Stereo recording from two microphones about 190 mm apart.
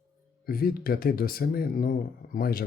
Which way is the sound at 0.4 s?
50° left (ahead or behind).